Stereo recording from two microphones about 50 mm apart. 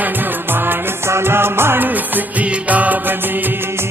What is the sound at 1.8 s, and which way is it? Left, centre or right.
Music, right.